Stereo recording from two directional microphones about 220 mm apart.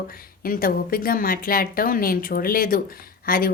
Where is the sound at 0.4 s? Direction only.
40° left (ahead or behind).